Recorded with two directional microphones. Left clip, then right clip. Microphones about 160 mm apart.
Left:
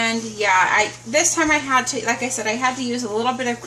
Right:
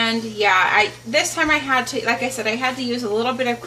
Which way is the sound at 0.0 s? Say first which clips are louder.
Right 2 dB; 25° right (ahead or behind).